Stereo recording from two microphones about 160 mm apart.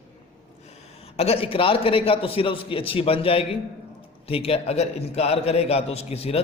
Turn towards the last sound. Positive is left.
turn(degrees=40)  # may be behind; listen again after turning